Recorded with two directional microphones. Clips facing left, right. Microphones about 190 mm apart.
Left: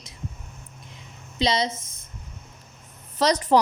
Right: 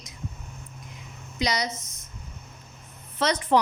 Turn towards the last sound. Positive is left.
turn(degrees=40)  # may be behind; listen again after turning